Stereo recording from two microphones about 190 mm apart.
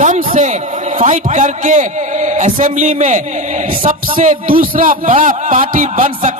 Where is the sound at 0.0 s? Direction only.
40° right (ahead or behind).